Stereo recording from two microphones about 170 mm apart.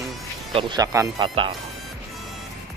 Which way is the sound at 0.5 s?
25° right (ahead or behind).